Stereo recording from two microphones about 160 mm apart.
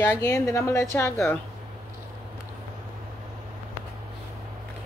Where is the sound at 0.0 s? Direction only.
15° left (ahead or behind).